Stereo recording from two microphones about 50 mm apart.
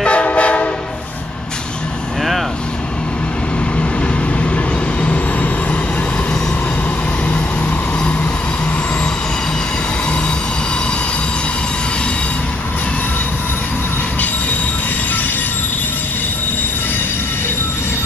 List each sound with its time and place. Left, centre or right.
0.0 s train: left
5.0 s train: left